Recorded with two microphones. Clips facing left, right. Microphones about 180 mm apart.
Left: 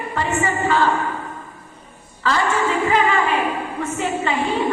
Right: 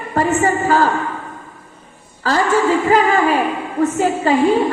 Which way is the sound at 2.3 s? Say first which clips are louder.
Right 5 dB; 40° right (ahead or behind).